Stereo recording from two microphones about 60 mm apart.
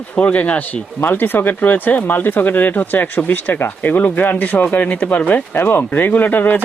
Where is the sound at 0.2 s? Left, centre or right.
Left.